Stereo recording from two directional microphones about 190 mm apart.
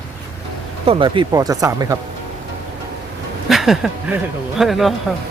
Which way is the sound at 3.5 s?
Centre (ahead or behind).